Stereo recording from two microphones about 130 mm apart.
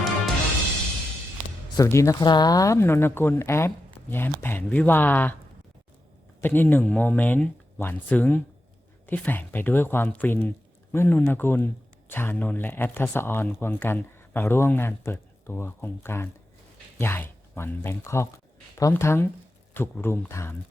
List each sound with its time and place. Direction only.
1.7 s speech: 25° left (ahead or behind)
6.4 s speech: 15° left (ahead or behind)